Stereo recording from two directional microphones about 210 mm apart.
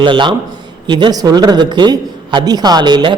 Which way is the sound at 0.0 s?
25° right (ahead or behind).